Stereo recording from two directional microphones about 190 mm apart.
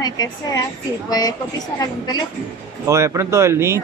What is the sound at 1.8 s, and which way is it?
Music, 20° left (ahead or behind).